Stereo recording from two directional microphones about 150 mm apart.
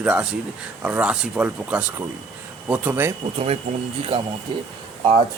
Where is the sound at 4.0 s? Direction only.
40° right (ahead or behind).